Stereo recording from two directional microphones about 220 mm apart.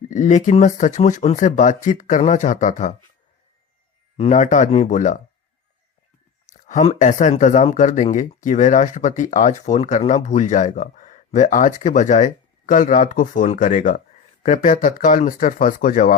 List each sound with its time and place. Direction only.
0.1 s speech: 35° left (ahead or behind)
4.2 s speech: 35° left (ahead or behind)
6.5 s speech: 35° left (ahead or behind)